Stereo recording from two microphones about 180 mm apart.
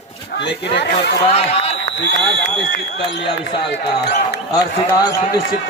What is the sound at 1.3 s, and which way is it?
Speech, 35° left (ahead or behind).